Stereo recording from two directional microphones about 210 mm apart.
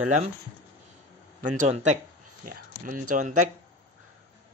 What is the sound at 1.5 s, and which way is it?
Speech, 35° right (ahead or behind).